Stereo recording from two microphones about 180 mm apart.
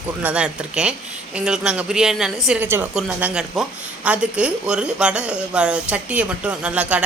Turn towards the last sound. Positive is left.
turn(degrees=-5)  # may be behind; listen again after turning